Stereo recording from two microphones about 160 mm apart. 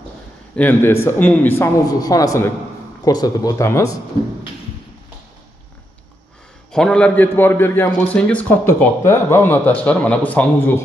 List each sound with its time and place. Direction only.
0.6 s a man's voice: 10° left (ahead or behind)
1.9 s speech: 25° left (ahead or behind)
6.7 s a man's voice: 5° left (ahead or behind)